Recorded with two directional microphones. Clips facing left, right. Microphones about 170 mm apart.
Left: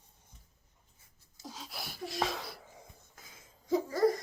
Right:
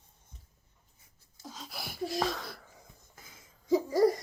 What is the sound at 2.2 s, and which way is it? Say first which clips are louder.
Wheeze: right 1 dB; centre (ahead or behind).